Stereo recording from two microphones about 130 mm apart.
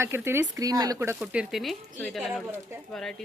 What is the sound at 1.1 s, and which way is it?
Speech, 5° right (ahead or behind).